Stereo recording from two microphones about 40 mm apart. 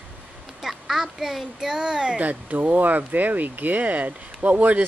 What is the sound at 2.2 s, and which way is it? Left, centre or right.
Speech, right.